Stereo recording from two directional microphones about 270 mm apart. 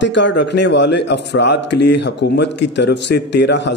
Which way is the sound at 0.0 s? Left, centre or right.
Left.